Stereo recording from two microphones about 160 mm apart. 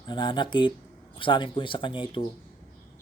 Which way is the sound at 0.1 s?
30° left (ahead or behind).